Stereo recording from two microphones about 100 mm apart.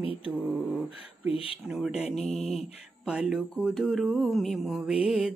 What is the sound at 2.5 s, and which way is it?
Mantra, 5° right (ahead or behind).